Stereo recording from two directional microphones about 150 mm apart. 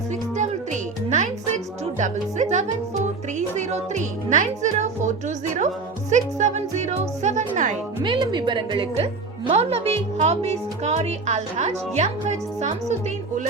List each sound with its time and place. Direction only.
0.3 s music: 55° right (ahead or behind)
3.3 s speech: 50° right (ahead or behind)
8.0 s a woman's voice: 30° right (ahead or behind)
9.5 s speech: 45° right (ahead or behind)